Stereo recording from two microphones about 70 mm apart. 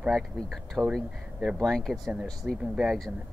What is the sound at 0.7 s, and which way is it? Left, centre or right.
Speech, centre.